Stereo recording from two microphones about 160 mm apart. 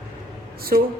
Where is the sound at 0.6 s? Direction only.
70° right (ahead or behind).